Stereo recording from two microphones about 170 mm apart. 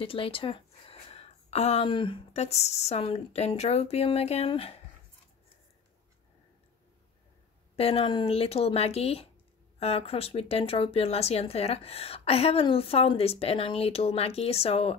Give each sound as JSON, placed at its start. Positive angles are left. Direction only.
{"t": 0.0, "sound": "speech", "side_deg": 30}
{"t": 7.7, "sound": "speech", "side_deg": 35}